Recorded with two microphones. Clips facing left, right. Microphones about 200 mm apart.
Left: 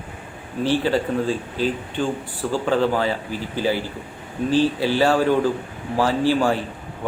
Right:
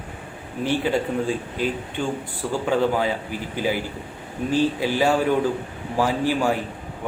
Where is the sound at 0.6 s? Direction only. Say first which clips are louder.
Left 2 dB; 15° right (ahead or behind).